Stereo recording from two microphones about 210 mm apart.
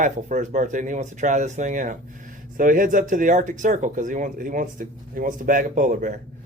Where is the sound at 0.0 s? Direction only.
35° right (ahead or behind).